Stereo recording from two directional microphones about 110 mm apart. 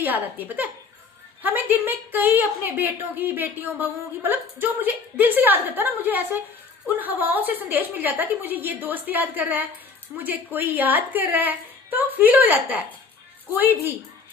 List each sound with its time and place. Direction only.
0.0 s a woman's voice: 15° right (ahead or behind)